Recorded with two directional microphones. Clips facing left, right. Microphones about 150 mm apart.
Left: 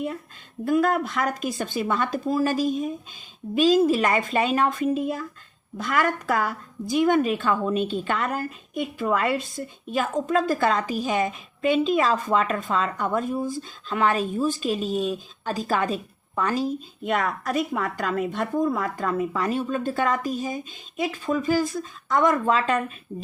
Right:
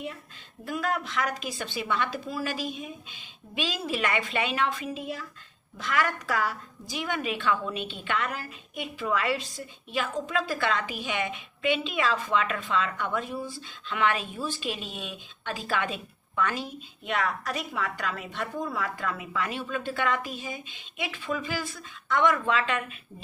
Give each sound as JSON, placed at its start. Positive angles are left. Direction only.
{"t": 0.6, "sound": "a woman's voice", "side_deg": 50}